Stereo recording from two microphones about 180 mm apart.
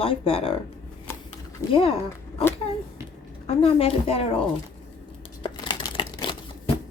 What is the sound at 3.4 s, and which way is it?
Speech, 30° left (ahead or behind).